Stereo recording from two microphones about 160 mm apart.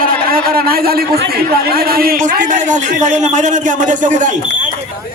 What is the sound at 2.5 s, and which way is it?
A man's voice, 50° right (ahead or behind).